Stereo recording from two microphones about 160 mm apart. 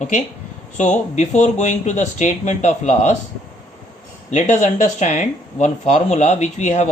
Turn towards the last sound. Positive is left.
turn(degrees=45)  # may be behind; listen again after turning